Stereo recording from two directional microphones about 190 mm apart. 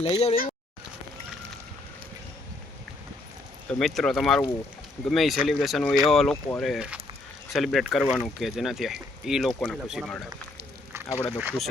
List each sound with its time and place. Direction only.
0.0 s speech: 35° left (ahead or behind)
3.7 s speech: centre (ahead or behind)
11.3 s speech: 5° right (ahead or behind)